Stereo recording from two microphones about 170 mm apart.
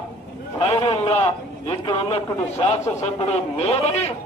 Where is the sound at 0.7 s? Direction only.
35° left (ahead or behind).